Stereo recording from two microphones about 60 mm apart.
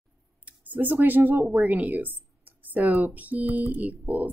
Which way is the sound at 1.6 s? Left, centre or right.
Right.